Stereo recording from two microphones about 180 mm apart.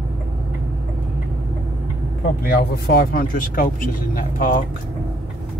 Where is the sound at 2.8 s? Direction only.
55° left (ahead or behind).